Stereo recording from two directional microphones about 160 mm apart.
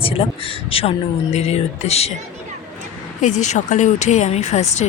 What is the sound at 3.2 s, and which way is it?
Speech, 50° left (ahead or behind).